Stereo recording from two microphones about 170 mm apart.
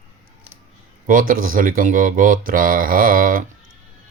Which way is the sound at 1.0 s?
55° right (ahead or behind).